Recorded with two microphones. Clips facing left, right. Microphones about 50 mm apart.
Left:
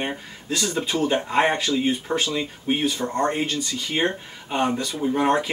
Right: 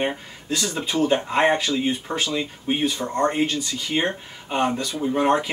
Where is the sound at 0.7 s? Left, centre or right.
Centre.